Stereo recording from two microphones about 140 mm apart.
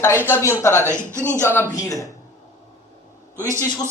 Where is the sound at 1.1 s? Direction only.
15° right (ahead or behind).